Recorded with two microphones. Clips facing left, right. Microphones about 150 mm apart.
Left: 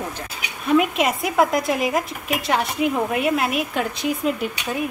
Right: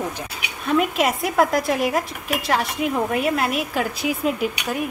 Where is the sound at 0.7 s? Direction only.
Centre (ahead or behind).